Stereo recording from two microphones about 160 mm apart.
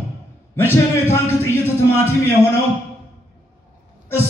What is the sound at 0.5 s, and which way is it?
Speech, 15° left (ahead or behind).